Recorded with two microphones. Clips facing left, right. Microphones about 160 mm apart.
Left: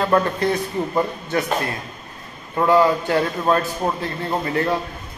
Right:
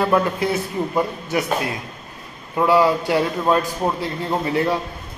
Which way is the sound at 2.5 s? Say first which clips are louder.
Even; 10° right (ahead or behind).